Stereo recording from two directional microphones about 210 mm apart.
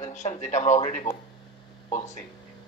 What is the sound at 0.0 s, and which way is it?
Speech, 35° left (ahead or behind).